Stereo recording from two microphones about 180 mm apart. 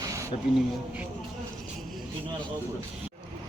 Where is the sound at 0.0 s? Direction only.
15° right (ahead or behind).